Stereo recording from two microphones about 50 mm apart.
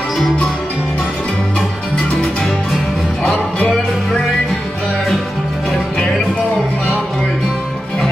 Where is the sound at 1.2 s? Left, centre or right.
Left.